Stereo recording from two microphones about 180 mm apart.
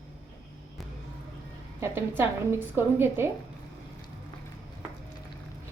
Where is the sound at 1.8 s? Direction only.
10° right (ahead or behind).